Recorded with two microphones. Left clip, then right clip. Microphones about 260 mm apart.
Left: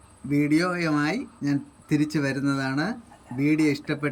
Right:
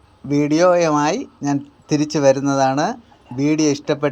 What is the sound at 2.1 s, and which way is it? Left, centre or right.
Speech, right.